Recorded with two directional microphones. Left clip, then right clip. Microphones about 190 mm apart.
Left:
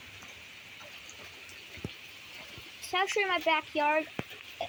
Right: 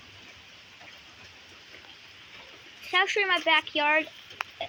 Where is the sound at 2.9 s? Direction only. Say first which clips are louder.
Right 5 dB; 10° right (ahead or behind).